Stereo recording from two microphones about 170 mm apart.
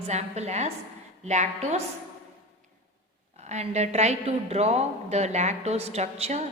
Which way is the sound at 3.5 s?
40° right (ahead or behind).